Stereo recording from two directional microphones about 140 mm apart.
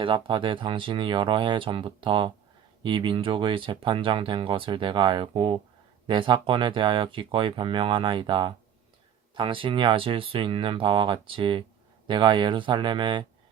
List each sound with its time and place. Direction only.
0.0 s speech: 35° right (ahead or behind)